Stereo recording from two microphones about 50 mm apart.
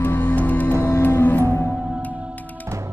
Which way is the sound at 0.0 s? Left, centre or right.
Left.